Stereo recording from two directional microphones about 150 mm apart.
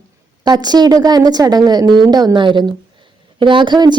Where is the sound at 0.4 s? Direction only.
25° right (ahead or behind).